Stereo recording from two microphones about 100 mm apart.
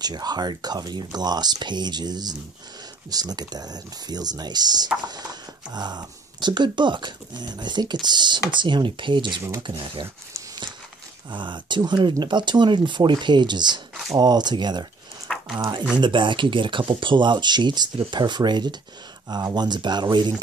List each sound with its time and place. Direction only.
0.0 s speech: 45° right (ahead or behind)
11.3 s speech: 50° right (ahead or behind)
15.3 s a sound: 5° left (ahead or behind)
16.0 s speech: 55° right (ahead or behind)